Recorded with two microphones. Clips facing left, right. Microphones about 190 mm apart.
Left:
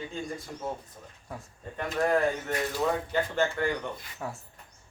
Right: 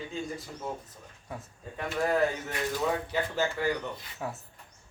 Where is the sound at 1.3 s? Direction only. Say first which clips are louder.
Even; centre (ahead or behind).